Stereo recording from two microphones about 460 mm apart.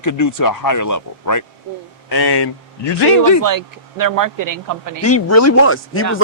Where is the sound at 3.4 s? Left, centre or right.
Right.